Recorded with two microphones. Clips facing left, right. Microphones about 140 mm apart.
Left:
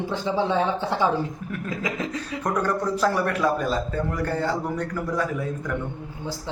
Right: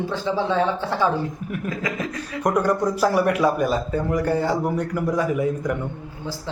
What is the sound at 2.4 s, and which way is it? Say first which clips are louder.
A man's voice: right 5 dB; 15° right (ahead or behind).